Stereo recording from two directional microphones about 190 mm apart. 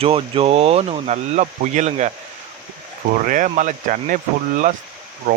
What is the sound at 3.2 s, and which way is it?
Speech, 45° right (ahead or behind).